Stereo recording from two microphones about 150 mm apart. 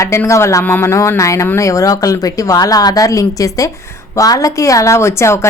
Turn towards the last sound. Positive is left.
turn(degrees=20)  # may be behind; listen again after turning